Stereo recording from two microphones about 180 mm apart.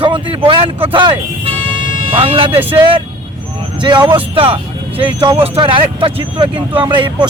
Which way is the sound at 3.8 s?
25° right (ahead or behind).